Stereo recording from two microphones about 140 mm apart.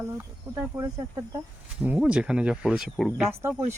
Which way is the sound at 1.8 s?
10° right (ahead or behind).